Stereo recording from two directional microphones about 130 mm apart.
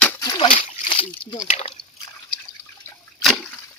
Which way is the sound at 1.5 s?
60° left (ahead or behind).